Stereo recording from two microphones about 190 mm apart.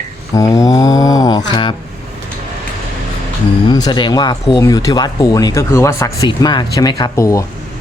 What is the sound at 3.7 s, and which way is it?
Speech, 20° left (ahead or behind).